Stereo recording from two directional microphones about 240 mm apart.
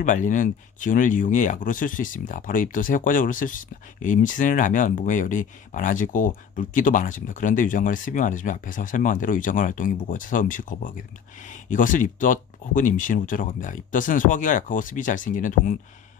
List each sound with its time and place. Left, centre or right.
0.0 s speech: left